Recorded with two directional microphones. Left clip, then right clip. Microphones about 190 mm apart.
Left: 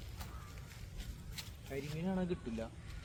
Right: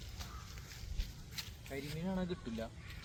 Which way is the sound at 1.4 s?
15° left (ahead or behind).